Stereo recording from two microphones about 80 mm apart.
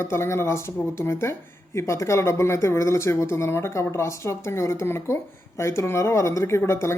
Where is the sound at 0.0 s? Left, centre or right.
Left.